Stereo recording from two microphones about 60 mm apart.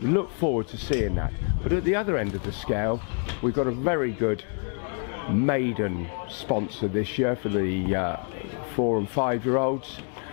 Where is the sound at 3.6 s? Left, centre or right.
Centre.